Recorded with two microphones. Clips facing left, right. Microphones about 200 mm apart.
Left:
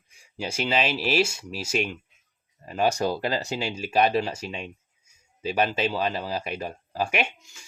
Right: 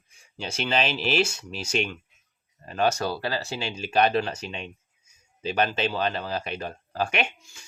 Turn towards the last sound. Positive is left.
turn(degrees=10)  # may be behind; listen again after turning